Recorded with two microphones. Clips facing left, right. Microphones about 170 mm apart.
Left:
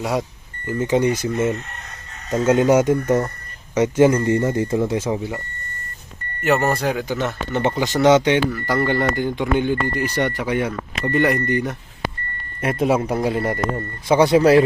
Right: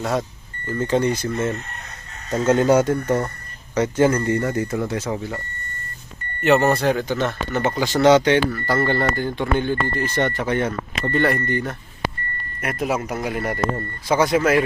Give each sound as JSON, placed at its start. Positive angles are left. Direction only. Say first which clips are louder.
{"t": 0.0, "sound": "speech", "louder": "left 1 dB", "side_deg": 10}
{"t": 6.4, "sound": "speech", "louder": "right 2 dB", "side_deg": 5}
{"t": 7.5, "sound": "speech", "louder": "left 2 dB", "side_deg": 20}
{"t": 12.6, "sound": "speech", "louder": "left 5 dB", "side_deg": 30}